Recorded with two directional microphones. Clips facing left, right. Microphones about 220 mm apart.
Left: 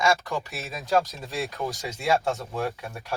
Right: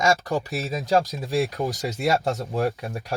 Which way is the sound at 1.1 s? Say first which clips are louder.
Right 8 dB; 15° right (ahead or behind).